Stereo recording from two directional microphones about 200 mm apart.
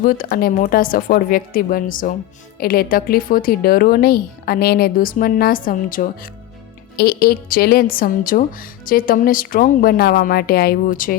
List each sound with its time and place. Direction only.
0.0 s a woman's voice: 45° left (ahead or behind)